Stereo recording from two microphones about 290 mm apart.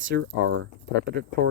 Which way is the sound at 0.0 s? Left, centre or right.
Right.